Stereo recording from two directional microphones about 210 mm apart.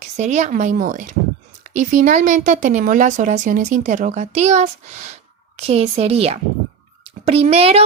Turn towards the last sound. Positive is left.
turn(degrees=-30)  # may be behind; listen again after turning